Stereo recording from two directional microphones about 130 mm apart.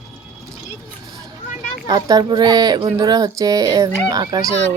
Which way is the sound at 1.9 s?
30° right (ahead or behind).